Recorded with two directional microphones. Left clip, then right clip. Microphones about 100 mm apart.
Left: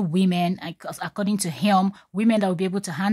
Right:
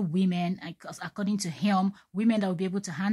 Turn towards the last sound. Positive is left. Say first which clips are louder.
# left 6 dB
turn(degrees=40)  # may be behind; listen again after turning